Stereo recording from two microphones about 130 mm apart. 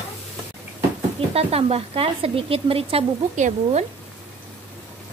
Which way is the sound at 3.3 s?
65° right (ahead or behind).